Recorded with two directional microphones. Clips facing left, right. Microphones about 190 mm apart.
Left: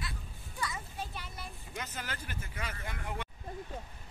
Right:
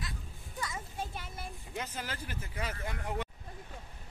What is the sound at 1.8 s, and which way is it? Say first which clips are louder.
Speech: right 2 dB; 30° right (ahead or behind).